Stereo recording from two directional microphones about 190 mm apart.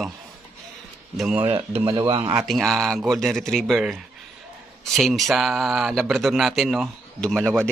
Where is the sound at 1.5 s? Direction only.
25° right (ahead or behind).